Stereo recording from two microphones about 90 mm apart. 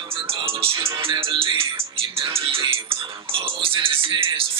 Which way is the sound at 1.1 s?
65° right (ahead or behind).